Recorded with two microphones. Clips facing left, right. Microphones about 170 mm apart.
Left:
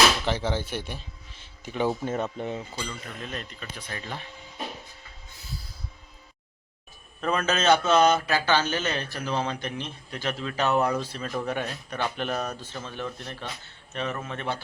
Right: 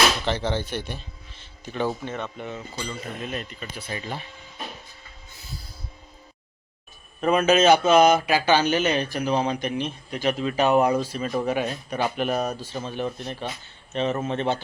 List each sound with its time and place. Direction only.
0.3 s speech: 5° left (ahead or behind)
2.4 s speech: 35° left (ahead or behind)
3.2 s speech: 10° right (ahead or behind)
7.2 s speech: 15° right (ahead or behind)